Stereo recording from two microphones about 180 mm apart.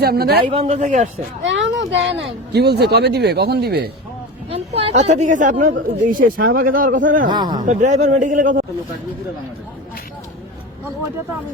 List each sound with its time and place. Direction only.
0.0 s speech: 60° right (ahead or behind)
0.5 s speech: 35° right (ahead or behind)
1.5 s speech: 90° right; by 3.8 s 60° right (ahead or behind)
4.5 s a woman's voice: 35° right (ahead or behind)
7.3 s speech: 25° right (ahead or behind)
7.6 s a woman's voice: 40° right (ahead or behind)